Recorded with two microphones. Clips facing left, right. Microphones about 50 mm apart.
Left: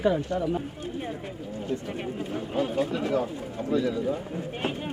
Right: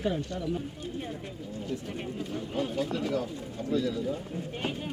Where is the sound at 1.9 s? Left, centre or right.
Left.